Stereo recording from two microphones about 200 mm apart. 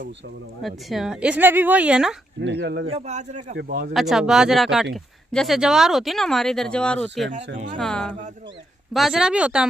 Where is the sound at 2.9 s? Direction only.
35° right (ahead or behind).